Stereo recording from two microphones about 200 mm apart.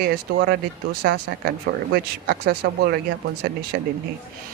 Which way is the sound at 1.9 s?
45° right (ahead or behind).